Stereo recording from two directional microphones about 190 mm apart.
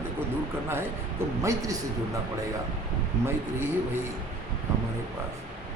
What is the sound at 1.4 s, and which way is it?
Speech, 20° right (ahead or behind).